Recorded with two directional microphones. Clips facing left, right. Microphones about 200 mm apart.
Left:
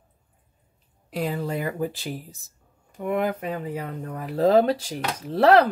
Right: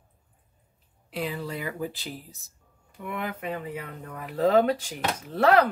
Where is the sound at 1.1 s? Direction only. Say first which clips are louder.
Left 5 dB; 45° left (ahead or behind).